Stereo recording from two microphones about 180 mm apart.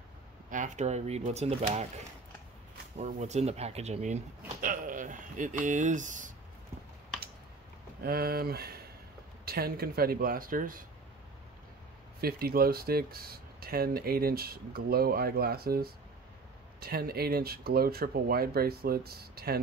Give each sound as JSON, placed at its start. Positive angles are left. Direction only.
{"t": 0.5, "sound": "speech", "side_deg": -45}
{"t": 3.0, "sound": "speech", "side_deg": -40}
{"t": 8.0, "sound": "speech", "side_deg": -60}
{"t": 12.2, "sound": "speech", "side_deg": -55}